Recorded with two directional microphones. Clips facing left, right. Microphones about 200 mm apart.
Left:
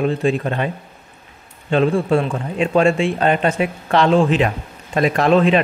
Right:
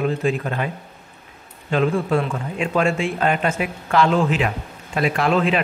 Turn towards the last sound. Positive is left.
turn(degrees=35)  # may be behind; listen again after turning